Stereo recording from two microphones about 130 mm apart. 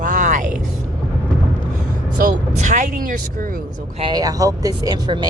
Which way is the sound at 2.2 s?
70° right (ahead or behind).